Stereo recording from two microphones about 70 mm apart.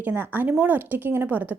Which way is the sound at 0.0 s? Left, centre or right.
Right.